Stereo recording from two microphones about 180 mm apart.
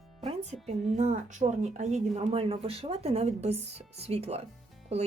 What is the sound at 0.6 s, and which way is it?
Speech, 35° right (ahead or behind).